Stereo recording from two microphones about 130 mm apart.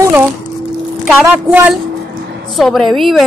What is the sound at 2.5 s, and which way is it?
Speech, centre (ahead or behind).